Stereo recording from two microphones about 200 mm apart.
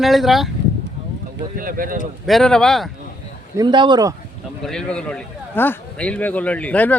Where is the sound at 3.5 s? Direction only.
25° right (ahead or behind).